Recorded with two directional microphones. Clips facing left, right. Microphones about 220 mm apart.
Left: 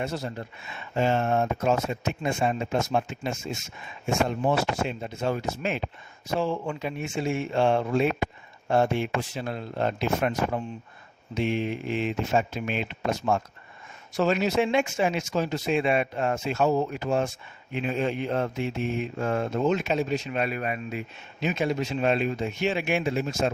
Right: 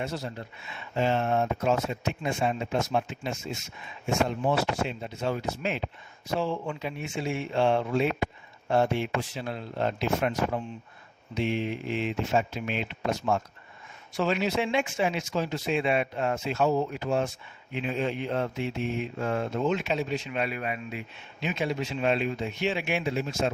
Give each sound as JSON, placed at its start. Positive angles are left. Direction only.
{"t": 0.0, "sound": "speech", "side_deg": 50}